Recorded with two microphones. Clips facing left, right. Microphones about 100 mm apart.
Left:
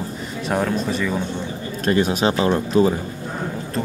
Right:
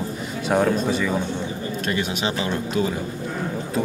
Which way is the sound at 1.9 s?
40° left (ahead or behind).